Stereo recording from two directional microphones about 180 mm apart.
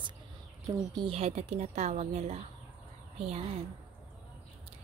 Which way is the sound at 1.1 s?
35° right (ahead or behind).